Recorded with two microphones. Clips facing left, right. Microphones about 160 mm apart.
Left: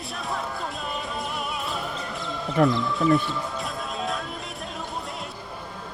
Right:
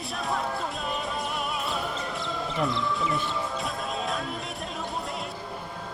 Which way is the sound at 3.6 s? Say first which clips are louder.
Even; centre (ahead or behind).